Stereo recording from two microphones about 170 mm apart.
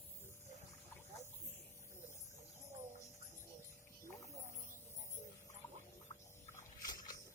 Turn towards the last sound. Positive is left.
turn(degrees=20)  # may be behind; listen again after turning